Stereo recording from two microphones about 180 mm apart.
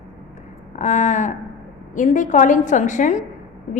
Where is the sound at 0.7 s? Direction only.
40° left (ahead or behind).